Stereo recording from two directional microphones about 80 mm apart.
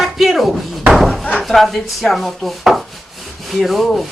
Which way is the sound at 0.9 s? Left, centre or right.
Centre.